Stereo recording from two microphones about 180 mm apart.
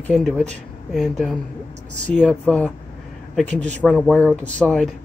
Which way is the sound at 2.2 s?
5° left (ahead or behind).